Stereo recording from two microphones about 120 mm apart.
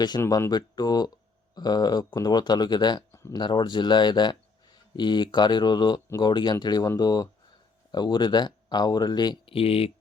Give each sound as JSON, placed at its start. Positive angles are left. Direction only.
{"t": 0.3, "sound": "speech", "side_deg": 30}